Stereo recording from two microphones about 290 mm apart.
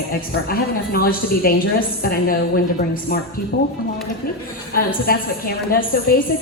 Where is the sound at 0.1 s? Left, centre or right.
Left.